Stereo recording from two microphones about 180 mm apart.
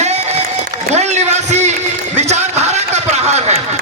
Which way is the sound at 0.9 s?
40° right (ahead or behind).